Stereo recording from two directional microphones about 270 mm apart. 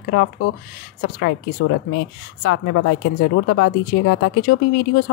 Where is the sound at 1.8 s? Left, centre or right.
Left.